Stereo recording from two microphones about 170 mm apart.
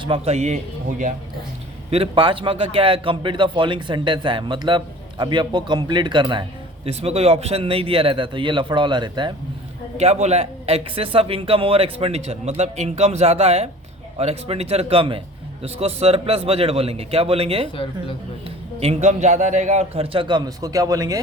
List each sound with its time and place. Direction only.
0.0 s speech: 35° right (ahead or behind)
1.9 s a man's voice: 30° right (ahead or behind)
10.0 s speech: 40° right (ahead or behind); by 21.2 s 20° right (ahead or behind)